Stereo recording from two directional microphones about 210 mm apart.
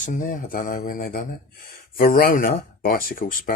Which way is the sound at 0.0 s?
40° left (ahead or behind).